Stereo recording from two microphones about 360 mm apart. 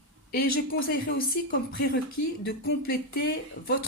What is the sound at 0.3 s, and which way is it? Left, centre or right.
Speech, left.